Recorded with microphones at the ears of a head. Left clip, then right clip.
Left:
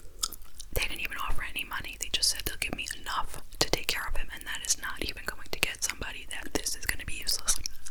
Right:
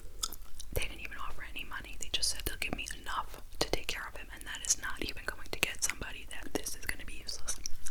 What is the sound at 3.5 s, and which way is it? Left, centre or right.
Whispering, left.